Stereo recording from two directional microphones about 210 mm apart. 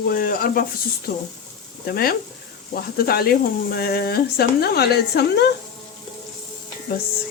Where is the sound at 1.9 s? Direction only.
45° left (ahead or behind).